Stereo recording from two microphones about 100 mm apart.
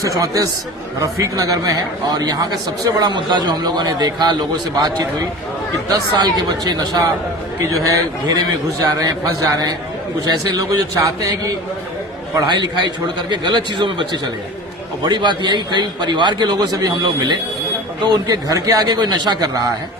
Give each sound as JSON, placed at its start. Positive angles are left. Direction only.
{"t": 0.0, "sound": "a man's voice", "side_deg": -35}